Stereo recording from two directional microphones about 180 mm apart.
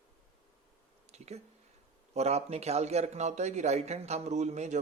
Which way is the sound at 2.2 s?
35° right (ahead or behind).